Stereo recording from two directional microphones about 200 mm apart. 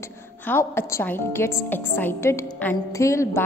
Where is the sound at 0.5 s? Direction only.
10° left (ahead or behind).